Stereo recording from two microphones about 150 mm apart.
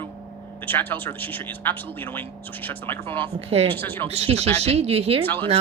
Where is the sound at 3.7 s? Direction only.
10° left (ahead or behind).